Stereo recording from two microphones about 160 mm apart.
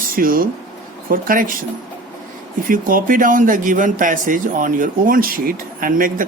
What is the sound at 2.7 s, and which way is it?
Speech, 60° right (ahead or behind).